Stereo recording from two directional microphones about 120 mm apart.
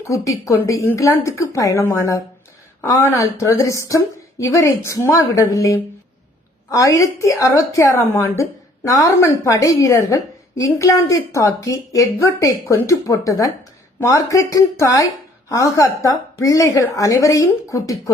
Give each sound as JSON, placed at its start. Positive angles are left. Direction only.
{"t": 0.0, "sound": "a woman's voice", "side_deg": 25}